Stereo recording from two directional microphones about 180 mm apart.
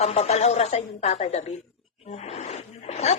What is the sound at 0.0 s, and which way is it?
A woman's voice, 35° left (ahead or behind).